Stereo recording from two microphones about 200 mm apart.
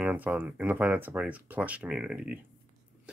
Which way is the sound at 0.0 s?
10° right (ahead or behind).